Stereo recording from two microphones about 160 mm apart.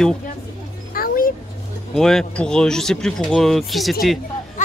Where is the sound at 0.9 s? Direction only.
60° left (ahead or behind).